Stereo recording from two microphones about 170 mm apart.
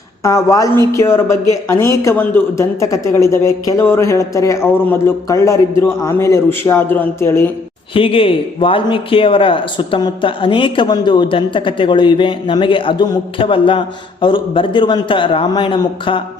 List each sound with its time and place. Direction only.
0.2 s speech: 20° left (ahead or behind)
7.9 s speech: 30° left (ahead or behind)